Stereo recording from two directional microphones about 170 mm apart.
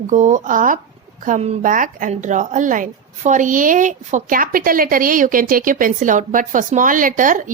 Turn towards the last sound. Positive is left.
turn(degrees=-50)  # may be behind; listen again after turning